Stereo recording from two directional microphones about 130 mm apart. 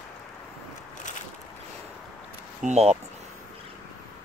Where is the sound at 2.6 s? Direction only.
60° right (ahead or behind).